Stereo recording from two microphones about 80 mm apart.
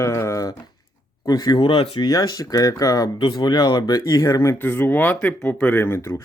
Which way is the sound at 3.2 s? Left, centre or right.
Left.